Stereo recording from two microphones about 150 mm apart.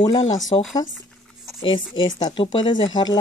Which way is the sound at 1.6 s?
35° left (ahead or behind).